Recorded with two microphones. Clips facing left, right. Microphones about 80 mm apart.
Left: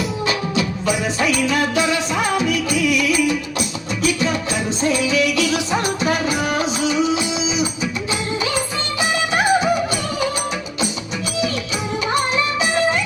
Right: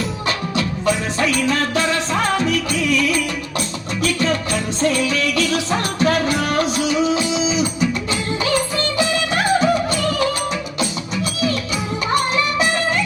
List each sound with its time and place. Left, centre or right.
0.3 s music: centre